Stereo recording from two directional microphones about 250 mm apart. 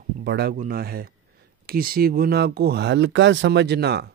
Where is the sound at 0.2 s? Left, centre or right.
Right.